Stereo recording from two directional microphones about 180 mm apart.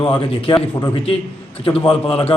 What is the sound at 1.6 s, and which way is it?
Speech, 30° left (ahead or behind).